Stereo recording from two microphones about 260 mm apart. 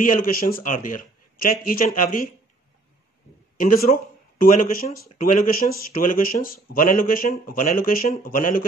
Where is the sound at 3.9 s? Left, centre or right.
Left.